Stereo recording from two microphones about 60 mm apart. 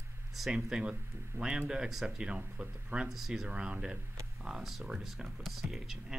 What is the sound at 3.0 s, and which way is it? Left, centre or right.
Speech, centre.